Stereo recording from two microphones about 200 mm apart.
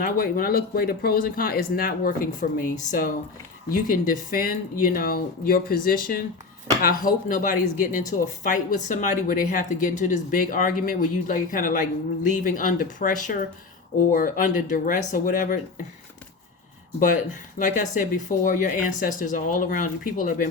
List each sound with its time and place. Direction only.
0.0 s a woman's voice: 45° left (ahead or behind)
17.6 s a woman's voice: 40° left (ahead or behind)